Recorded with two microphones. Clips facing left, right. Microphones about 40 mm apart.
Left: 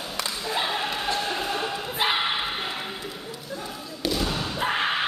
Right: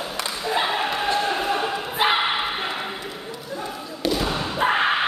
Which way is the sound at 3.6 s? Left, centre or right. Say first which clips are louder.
Right 4 dB; centre.